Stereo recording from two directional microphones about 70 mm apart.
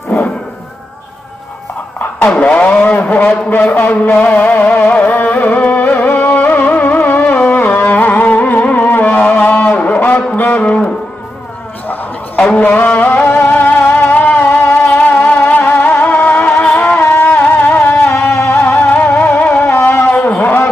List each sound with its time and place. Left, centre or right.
2.1 s a man's voice: left
7.3 s music: left
12.5 s music: left
20.1 s a sound: centre